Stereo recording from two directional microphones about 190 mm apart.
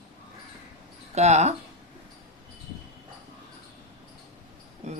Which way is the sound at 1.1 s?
35° right (ahead or behind).